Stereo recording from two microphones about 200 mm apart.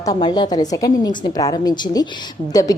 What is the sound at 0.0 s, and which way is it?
A woman's voice, 20° left (ahead or behind).